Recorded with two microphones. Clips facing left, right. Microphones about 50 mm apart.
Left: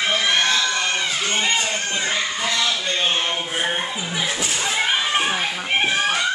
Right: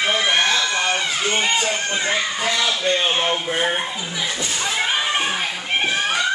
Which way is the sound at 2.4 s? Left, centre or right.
Centre.